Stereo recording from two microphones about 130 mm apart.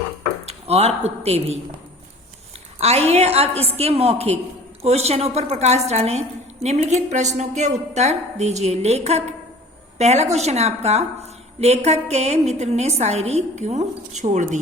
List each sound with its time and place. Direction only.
0.4 s speech: 50° right (ahead or behind)
2.8 s a woman's voice: 55° right (ahead or behind)